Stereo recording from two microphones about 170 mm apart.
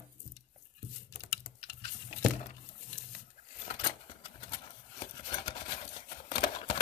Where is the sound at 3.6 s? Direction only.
30° left (ahead or behind).